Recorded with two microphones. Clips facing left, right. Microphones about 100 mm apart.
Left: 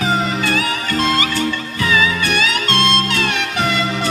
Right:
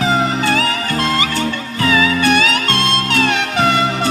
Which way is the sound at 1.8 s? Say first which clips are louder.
Right 3 dB; 30° right (ahead or behind).